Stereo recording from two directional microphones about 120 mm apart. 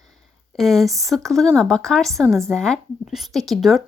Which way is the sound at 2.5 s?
5° left (ahead or behind).